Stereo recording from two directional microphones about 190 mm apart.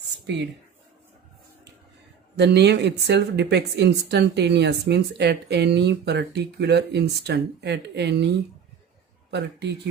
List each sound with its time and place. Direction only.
2.3 s speech: 65° right (ahead or behind)
9.3 s speech: 65° right (ahead or behind)